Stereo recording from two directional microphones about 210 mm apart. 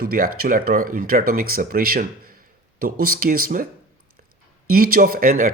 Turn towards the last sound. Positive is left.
turn(degrees=-40)  # may be behind; listen again after turning